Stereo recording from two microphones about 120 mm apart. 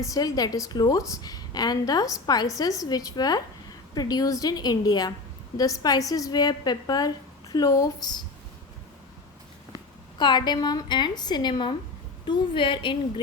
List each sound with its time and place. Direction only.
0.0 s a woman's voice: 30° left (ahead or behind)
9.7 s a woman's voice: 40° left (ahead or behind)